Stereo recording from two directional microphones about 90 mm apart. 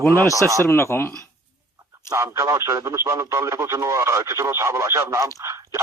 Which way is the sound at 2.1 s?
35° right (ahead or behind).